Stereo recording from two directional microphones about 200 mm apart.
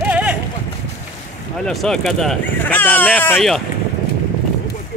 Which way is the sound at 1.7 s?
Centre (ahead or behind).